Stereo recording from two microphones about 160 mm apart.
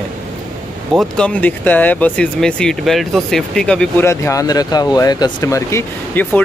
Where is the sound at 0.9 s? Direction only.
5° left (ahead or behind).